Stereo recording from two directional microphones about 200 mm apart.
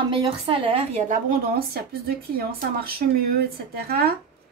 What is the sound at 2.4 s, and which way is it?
A woman's voice, 50° right (ahead or behind).